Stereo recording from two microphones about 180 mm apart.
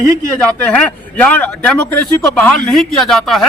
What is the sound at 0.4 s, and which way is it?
A man's voice, 5° left (ahead or behind).